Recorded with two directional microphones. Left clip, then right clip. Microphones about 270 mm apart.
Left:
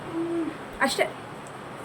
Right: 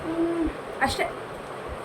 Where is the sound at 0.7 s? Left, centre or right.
Centre.